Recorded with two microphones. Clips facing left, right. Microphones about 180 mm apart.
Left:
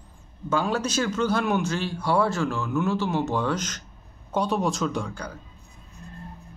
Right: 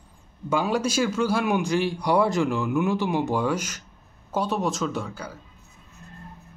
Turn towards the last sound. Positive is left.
turn(degrees=-5)  # may be behind; listen again after turning